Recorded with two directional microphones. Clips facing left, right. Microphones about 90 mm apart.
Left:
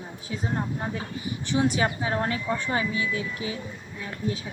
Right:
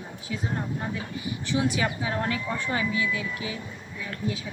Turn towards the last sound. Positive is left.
turn(degrees=30)  # may be behind; listen again after turning